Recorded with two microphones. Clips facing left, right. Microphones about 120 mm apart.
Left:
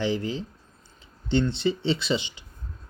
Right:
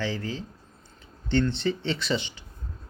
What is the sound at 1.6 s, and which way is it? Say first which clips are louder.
Speech: left 3 dB; 15° left (ahead or behind).